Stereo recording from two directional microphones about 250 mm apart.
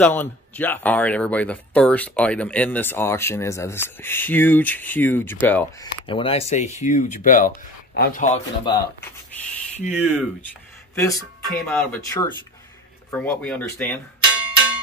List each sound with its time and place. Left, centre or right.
0.0 s speech: centre
6.0 s speech: left
8.6 s speech: centre
11.0 s speech: centre